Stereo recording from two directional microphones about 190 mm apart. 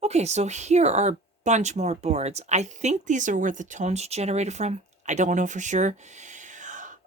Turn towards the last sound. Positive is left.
turn(degrees=-40)  # may be behind; listen again after turning